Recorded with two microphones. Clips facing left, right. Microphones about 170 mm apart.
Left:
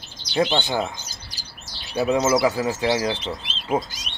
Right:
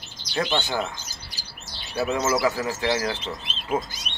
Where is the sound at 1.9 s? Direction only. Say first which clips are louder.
Left 4 dB; 20° left (ahead or behind).